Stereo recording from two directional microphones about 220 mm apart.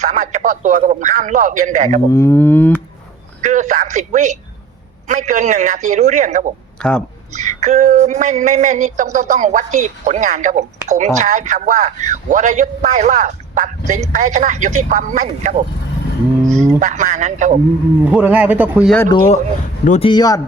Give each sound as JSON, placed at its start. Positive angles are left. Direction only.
{"t": 0.0, "sound": "speech", "side_deg": -35}
{"t": 2.1, "sound": "speech", "side_deg": 10}
{"t": 3.4, "sound": "speech", "side_deg": -35}
{"t": 6.8, "sound": "speech", "side_deg": 5}
{"t": 7.3, "sound": "speech", "side_deg": -30}
{"t": 18.1, "sound": "a man's voice", "side_deg": -5}
{"t": 19.8, "sound": "speech", "side_deg": 35}
{"t": 20.1, "sound": "speech", "side_deg": 15}